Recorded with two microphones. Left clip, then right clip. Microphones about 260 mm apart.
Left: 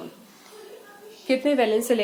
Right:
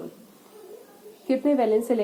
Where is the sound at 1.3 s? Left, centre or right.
Left.